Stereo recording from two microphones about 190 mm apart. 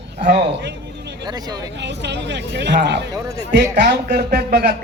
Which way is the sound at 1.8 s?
65° right (ahead or behind).